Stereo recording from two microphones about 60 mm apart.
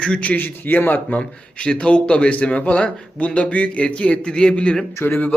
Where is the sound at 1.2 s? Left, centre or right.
Centre.